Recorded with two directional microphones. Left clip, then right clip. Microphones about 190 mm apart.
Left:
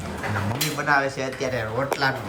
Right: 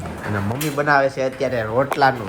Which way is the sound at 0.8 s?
Centre (ahead or behind).